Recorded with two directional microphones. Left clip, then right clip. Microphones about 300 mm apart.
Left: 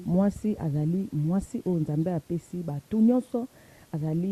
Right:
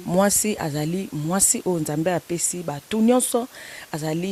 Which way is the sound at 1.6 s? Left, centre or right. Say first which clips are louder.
Right 5 dB; right.